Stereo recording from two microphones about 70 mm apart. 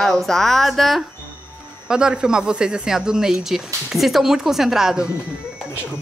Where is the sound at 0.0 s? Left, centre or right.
Centre.